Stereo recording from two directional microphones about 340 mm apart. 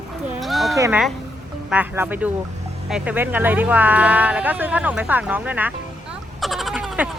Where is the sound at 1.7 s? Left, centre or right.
Centre.